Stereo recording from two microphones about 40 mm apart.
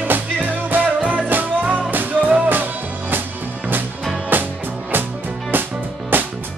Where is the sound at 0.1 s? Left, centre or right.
Right.